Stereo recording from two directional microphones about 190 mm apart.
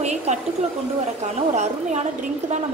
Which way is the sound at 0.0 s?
35° right (ahead or behind).